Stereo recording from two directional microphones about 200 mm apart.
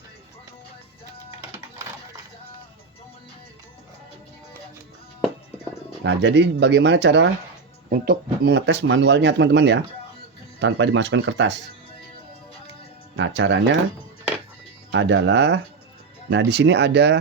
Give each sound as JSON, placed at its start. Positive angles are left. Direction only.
{"t": 6.0, "sound": "speech", "side_deg": -65}
{"t": 7.9, "sound": "speech", "side_deg": -45}
{"t": 13.1, "sound": "speech", "side_deg": -65}
{"t": 14.9, "sound": "speech", "side_deg": -65}